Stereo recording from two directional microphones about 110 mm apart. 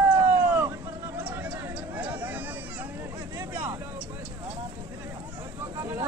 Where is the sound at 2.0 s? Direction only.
15° right (ahead or behind).